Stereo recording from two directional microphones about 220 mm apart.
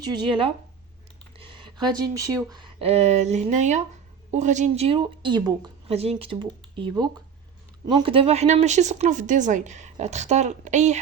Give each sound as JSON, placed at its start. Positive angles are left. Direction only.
{"t": 0.0, "sound": "speech", "side_deg": -25}